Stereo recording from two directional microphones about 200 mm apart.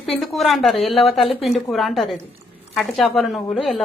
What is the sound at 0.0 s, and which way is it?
A woman's voice, centre (ahead or behind).